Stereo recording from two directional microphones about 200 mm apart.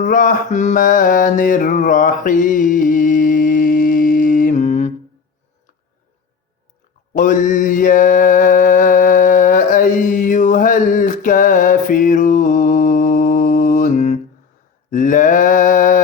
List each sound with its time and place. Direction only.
0.0 s mantra: 40° left (ahead or behind)
7.1 s mantra: 40° left (ahead or behind)